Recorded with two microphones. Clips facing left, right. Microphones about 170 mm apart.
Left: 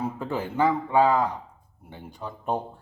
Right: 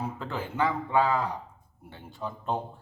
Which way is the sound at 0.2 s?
15° left (ahead or behind).